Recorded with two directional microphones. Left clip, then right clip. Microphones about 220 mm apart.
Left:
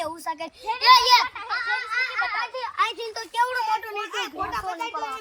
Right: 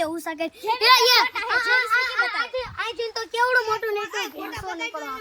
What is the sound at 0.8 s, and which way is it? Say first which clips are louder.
Speech: left 1 dB; 10° right (ahead or behind).